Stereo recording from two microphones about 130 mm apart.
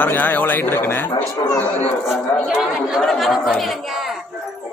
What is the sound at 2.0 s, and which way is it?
Speech, centre (ahead or behind).